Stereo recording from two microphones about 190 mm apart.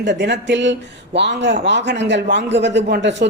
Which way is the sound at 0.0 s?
65° right (ahead or behind).